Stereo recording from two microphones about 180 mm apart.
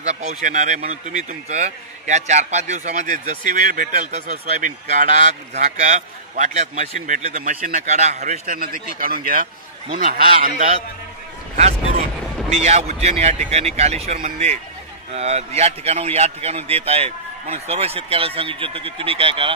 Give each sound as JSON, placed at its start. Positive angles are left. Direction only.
{"t": 0.0, "sound": "a man's voice", "side_deg": -40}
{"t": 10.4, "sound": "a man's voice", "side_deg": -40}
{"t": 12.5, "sound": "a man's voice", "side_deg": -40}